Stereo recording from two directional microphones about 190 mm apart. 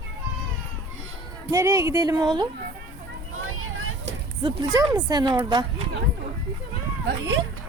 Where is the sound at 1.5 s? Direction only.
15° right (ahead or behind).